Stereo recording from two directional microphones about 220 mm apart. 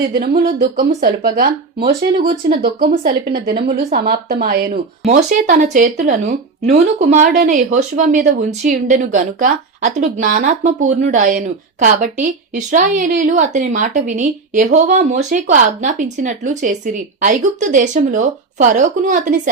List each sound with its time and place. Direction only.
0.6 s a woman's voice: 40° right (ahead or behind)
5.0 s a woman's voice: 35° right (ahead or behind)